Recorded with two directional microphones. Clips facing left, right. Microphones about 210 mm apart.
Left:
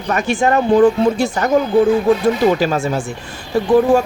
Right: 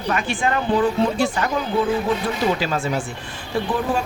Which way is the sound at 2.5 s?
45° left (ahead or behind).